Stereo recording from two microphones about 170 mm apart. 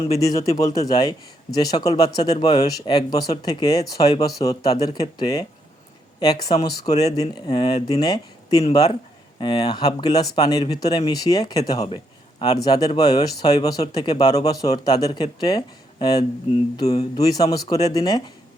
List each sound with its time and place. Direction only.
0.1 s speech: 20° left (ahead or behind)